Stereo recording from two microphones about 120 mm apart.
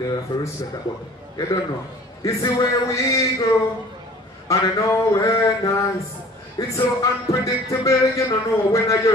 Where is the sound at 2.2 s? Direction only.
25° left (ahead or behind).